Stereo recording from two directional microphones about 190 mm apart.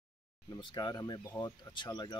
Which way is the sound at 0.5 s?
20° left (ahead or behind).